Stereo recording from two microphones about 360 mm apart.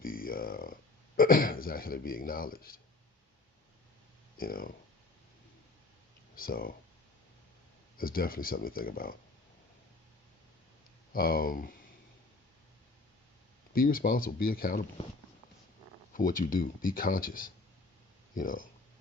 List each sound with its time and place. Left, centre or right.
0.0 s speech: left
4.4 s speech: left
6.3 s speech: left
7.9 s speech: left
11.1 s speech: left
13.7 s speech: left
16.1 s speech: left